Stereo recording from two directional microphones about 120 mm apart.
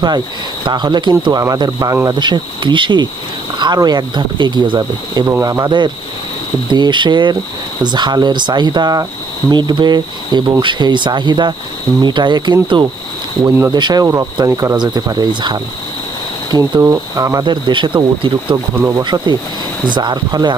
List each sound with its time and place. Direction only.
0.6 s speech: 35° right (ahead or behind)
5.2 s speech: 25° right (ahead or behind)
17.4 s speech: 40° right (ahead or behind)
18.8 s speech: 25° right (ahead or behind)
19.0 s speech: 35° right (ahead or behind)